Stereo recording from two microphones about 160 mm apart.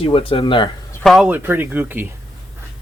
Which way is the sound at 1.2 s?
15° right (ahead or behind).